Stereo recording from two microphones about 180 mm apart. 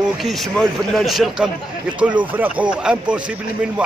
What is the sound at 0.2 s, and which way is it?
A man's voice, centre (ahead or behind).